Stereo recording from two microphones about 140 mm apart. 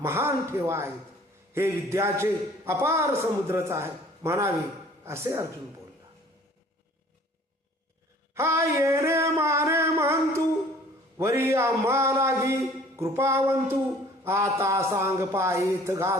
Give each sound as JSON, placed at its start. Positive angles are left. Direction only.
{"t": 0.0, "sound": "a man's voice", "side_deg": -20}
{"t": 8.4, "sound": "a man's voice", "side_deg": -20}